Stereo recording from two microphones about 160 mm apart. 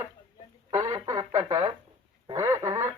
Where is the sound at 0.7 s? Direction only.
20° right (ahead or behind).